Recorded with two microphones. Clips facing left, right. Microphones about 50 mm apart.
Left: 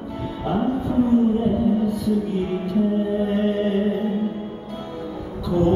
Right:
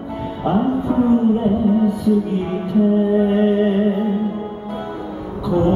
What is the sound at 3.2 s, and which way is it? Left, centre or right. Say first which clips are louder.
Music: right 6 dB; centre.